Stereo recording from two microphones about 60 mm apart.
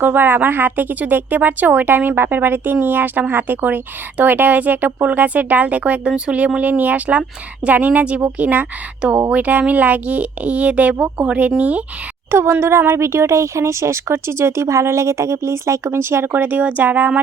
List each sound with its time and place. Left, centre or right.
0.0 s speech: right
12.3 s speech: right